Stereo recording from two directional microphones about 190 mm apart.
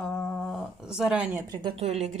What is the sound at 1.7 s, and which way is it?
Speech, 35° right (ahead or behind).